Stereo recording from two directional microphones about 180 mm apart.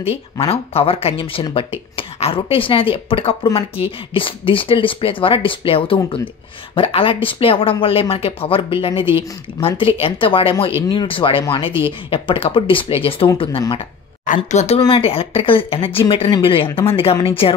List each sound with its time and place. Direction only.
0.4 s speech: 35° left (ahead or behind)
14.2 s speech: 45° left (ahead or behind)
14.8 s speech: 30° left (ahead or behind)